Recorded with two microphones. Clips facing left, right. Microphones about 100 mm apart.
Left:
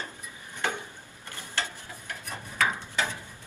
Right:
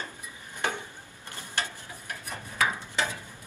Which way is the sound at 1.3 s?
20° right (ahead or behind).